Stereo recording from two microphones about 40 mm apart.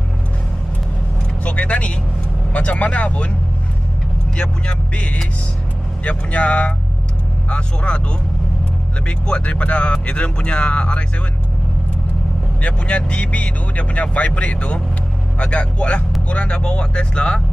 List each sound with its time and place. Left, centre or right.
1.4 s speech: left
4.4 s speech: left
9.0 s speech: left
12.6 s speech: left